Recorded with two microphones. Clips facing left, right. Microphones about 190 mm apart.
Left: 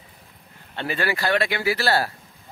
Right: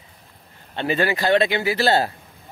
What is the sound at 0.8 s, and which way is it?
Speech, 20° right (ahead or behind).